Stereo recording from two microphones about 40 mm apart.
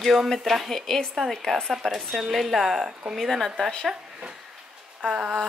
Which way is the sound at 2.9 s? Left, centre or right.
Centre.